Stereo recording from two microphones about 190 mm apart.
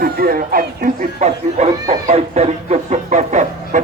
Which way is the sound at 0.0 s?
50° right (ahead or behind).